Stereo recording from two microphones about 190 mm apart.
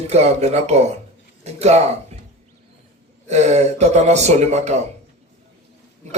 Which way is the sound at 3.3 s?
35° right (ahead or behind).